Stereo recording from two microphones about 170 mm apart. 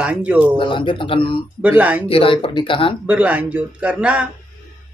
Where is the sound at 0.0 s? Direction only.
5° right (ahead or behind).